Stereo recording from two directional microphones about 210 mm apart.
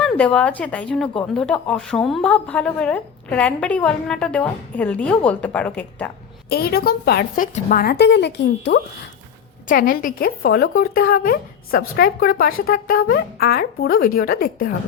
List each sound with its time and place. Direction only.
0.0 s speech: 5° left (ahead or behind)
6.5 s a woman's voice: 45° left (ahead or behind)
9.6 s a woman's voice: 40° left (ahead or behind)